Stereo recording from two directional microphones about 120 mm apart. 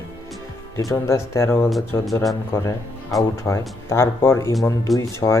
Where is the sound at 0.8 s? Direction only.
25° left (ahead or behind).